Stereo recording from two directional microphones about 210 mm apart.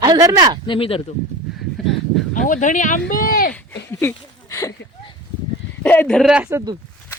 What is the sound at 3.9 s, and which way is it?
Speech, 15° left (ahead or behind).